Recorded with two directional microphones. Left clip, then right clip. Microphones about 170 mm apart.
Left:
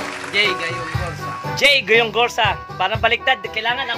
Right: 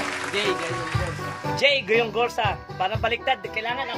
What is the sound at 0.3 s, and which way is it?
Speech, 20° right (ahead or behind).